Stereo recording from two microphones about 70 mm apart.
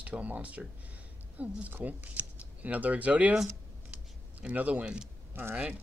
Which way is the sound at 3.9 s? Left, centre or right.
Centre.